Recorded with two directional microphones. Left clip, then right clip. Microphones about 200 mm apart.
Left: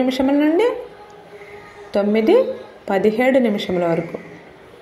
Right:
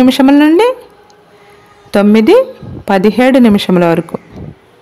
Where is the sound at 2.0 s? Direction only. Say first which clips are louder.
Right 8 dB; 35° right (ahead or behind).